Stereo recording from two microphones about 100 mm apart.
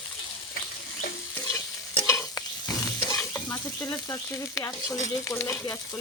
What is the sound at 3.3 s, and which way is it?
Frying, 25° left (ahead or behind).